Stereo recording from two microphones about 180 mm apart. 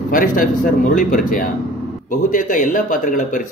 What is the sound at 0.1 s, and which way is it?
Speech, 50° left (ahead or behind).